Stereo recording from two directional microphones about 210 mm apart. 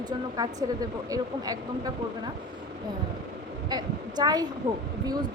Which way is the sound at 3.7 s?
20° right (ahead or behind).